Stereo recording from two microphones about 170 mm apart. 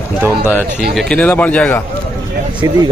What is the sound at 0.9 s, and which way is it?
Speech, 5° left (ahead or behind).